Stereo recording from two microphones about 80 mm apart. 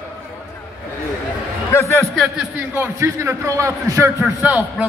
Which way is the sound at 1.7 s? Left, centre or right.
Left.